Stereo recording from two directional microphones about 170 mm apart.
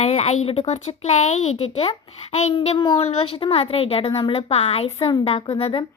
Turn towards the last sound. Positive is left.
turn(degrees=35)  # may be behind; listen again after turning